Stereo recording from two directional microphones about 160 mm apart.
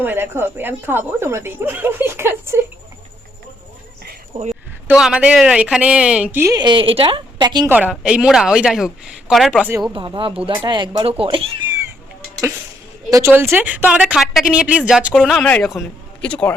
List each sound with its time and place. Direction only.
0.0 s a woman's voice: 15° right (ahead or behind)
4.3 s a man's voice: 50° right (ahead or behind)
4.9 s a woman's voice: 5° right (ahead or behind)
6.6 s speech: 30° right (ahead or behind)
7.7 s speech: 10° right (ahead or behind)
9.9 s speech: 30° right (ahead or behind)
13.1 s a woman's voice: 20° right (ahead or behind); by 16.6 s 5° left (ahead or behind)